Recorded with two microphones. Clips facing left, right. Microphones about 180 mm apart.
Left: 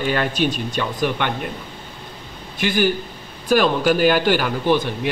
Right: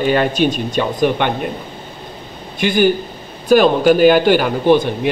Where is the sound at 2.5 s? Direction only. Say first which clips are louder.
Right 5 dB; 20° right (ahead or behind).